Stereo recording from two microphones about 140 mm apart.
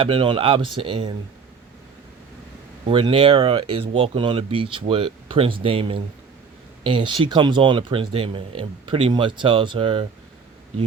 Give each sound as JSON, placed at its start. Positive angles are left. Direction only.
{"t": 0.0, "sound": "speech", "side_deg": -35}
{"t": 2.8, "sound": "speech", "side_deg": -40}